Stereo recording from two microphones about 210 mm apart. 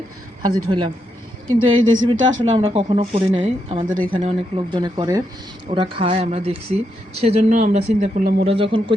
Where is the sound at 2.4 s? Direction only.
25° right (ahead or behind).